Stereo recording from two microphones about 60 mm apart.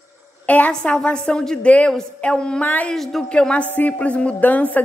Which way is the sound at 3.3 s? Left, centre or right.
Centre.